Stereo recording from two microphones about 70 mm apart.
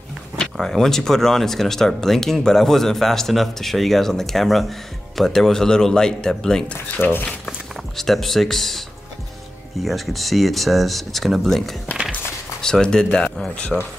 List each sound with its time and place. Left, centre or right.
0.4 s speech: centre
9.8 s speech: centre